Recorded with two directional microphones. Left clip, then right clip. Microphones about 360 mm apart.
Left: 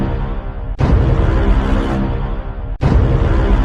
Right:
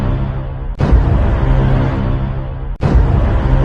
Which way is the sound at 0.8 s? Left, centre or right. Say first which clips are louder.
Even; centre.